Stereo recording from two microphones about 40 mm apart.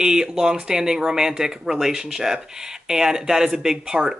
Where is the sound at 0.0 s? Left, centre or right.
Centre.